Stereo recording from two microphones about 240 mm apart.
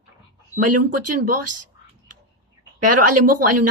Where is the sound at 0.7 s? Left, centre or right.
Right.